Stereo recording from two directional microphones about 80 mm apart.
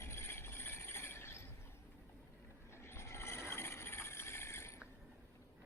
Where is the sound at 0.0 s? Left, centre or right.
Left.